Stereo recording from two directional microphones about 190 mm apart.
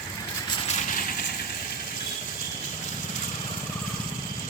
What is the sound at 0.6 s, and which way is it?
Vehicle, 40° left (ahead or behind).